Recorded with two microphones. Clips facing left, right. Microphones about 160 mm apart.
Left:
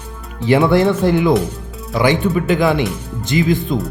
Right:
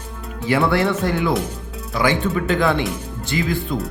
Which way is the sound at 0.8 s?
40° left (ahead or behind).